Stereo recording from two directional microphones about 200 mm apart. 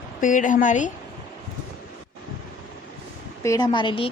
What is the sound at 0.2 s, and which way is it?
Speech, 40° left (ahead or behind).